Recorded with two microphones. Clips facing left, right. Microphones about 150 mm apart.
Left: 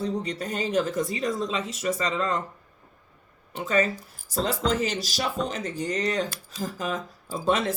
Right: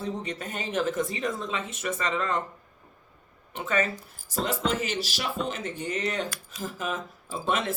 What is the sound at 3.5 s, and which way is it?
Speech, 35° left (ahead or behind).